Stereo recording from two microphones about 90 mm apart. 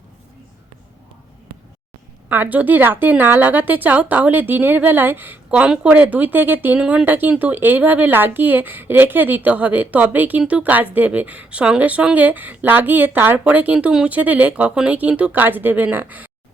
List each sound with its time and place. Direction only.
2.3 s speech: 20° right (ahead or behind)